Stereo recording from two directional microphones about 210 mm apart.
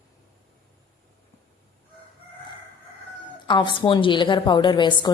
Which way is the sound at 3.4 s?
20° left (ahead or behind).